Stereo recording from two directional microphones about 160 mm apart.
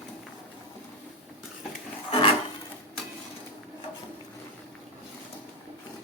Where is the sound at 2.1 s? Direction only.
35° left (ahead or behind).